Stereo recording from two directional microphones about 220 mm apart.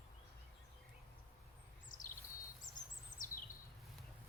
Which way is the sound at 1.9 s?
35° left (ahead or behind).